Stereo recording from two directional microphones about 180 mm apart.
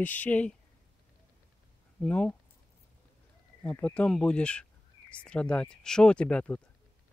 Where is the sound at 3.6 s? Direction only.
5° left (ahead or behind).